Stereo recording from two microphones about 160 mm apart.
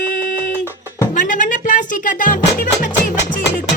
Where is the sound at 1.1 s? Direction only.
50° left (ahead or behind).